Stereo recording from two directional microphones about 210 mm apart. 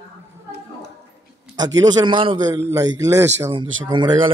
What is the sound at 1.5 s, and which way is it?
A man's voice, 20° right (ahead or behind).